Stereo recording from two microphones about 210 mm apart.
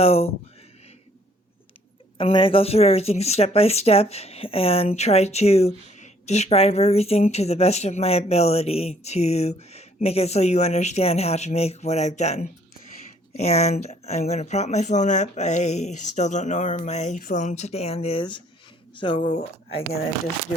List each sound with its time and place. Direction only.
0.0 s speech: 30° left (ahead or behind)
2.1 s speech: 25° left (ahead or behind)